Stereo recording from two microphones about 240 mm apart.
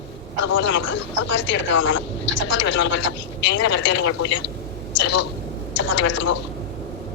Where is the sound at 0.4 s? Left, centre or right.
Left.